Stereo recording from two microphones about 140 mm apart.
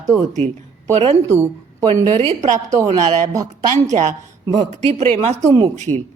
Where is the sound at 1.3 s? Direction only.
20° right (ahead or behind).